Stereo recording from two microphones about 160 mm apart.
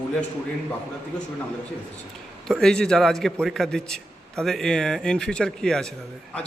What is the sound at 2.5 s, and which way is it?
A man's voice, 5° left (ahead or behind).